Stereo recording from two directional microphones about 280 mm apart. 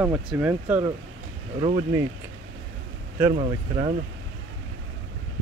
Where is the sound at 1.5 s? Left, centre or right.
Centre.